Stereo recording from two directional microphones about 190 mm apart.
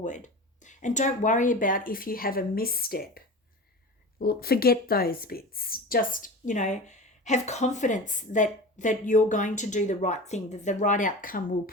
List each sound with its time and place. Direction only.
0.0 s a woman's voice: 40° left (ahead or behind)